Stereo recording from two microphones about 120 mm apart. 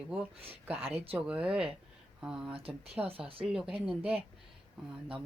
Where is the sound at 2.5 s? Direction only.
50° right (ahead or behind).